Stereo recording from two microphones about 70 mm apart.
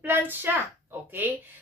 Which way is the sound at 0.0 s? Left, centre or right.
Right.